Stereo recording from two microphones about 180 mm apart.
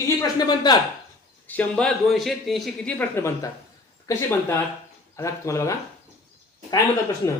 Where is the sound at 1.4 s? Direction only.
10° left (ahead or behind).